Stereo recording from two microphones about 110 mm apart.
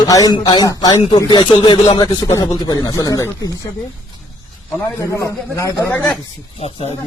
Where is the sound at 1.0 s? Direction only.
45° left (ahead or behind).